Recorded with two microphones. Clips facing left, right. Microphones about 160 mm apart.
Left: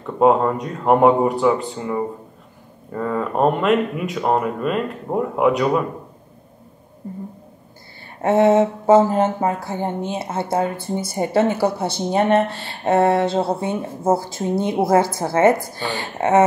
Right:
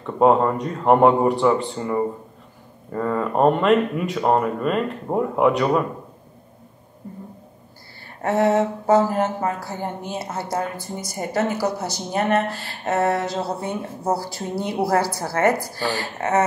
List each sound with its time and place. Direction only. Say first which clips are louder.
0.0 s speech: left 1 dB; centre (ahead or behind)
8.2 s speech: left 4 dB; 25° left (ahead or behind)